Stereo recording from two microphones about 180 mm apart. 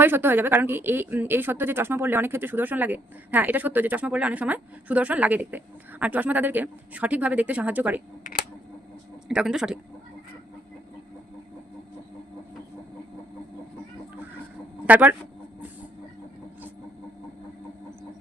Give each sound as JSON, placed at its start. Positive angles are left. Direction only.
{"t": 0.0, "sound": "speech", "side_deg": -10}
{"t": 8.2, "sound": "a sound", "side_deg": 55}
{"t": 9.3, "sound": "speech", "side_deg": -5}
{"t": 14.8, "sound": "speech", "side_deg": -10}